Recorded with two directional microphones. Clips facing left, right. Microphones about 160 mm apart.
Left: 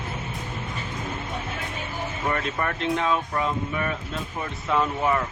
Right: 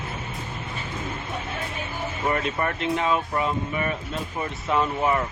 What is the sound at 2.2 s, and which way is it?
Speech, 5° right (ahead or behind).